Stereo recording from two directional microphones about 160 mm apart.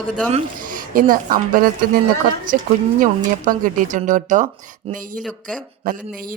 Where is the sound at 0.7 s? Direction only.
60° right (ahead or behind).